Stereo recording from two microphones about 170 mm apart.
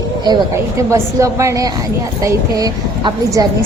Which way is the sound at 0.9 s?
15° right (ahead or behind).